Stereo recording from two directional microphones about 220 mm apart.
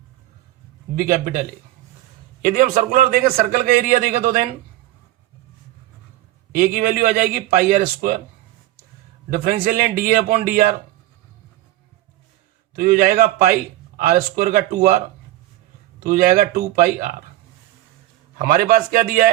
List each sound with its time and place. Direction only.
0.9 s a man's voice: 40° right (ahead or behind)
6.5 s a man's voice: 40° right (ahead or behind)
9.3 s a man's voice: 40° right (ahead or behind)
12.7 s a man's voice: 40° right (ahead or behind)
16.0 s a man's voice: 40° right (ahead or behind)
18.3 s a man's voice: 40° right (ahead or behind)